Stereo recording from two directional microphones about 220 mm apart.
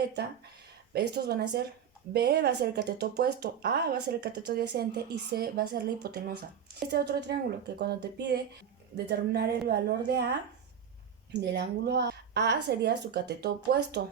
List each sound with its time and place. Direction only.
0.9 s speech: 45° right (ahead or behind)
11.3 s speech: 50° right (ahead or behind)